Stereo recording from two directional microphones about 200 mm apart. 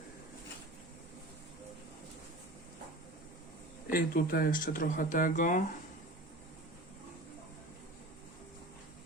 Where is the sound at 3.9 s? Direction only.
45° left (ahead or behind).